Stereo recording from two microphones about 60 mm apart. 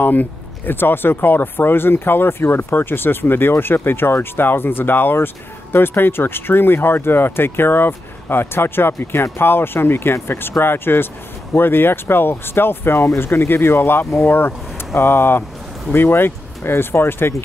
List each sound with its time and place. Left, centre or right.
0.0 s speech: left